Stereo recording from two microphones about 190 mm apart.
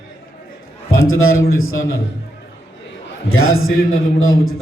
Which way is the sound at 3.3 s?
90° left.